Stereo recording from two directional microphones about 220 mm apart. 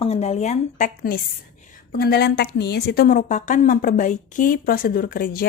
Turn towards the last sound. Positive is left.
turn(degrees=40)  # may be behind; listen again after turning